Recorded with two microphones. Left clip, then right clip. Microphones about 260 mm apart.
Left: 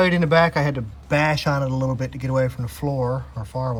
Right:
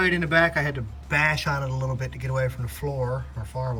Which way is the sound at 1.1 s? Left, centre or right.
Centre.